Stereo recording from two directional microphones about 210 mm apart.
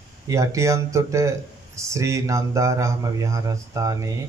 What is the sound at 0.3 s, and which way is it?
Speech, 15° right (ahead or behind).